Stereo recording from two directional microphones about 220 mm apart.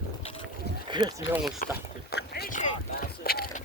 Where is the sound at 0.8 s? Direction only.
20° right (ahead or behind).